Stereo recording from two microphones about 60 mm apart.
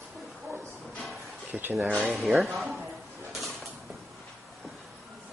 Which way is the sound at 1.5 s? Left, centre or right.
Right.